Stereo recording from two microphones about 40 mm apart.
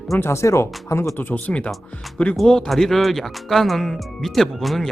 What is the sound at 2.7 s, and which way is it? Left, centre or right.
Speech, centre.